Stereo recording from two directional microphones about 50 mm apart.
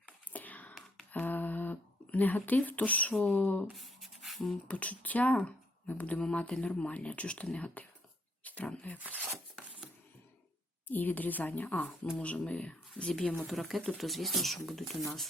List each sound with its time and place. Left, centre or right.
0.0 s whispering: left
0.7 s a sound: centre
1.2 s a sound: left
3.1 s speech: centre
3.3 s a woman's voice: left
3.8 s beatboxing: centre
4.7 s speech: left
6.1 s speech: centre
9.0 s speech: right
10.8 s a woman's voice: left
13.5 s speech: centre